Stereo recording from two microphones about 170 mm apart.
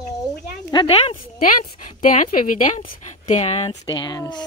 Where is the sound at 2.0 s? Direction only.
50° left (ahead or behind).